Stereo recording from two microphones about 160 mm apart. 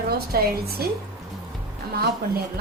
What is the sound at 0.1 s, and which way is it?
Speech, 75° right (ahead or behind).